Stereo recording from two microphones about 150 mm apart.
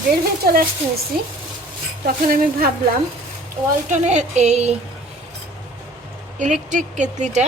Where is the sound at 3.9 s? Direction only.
50° right (ahead or behind).